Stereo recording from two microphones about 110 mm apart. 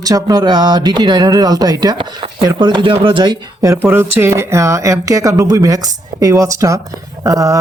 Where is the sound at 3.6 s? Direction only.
25° right (ahead or behind).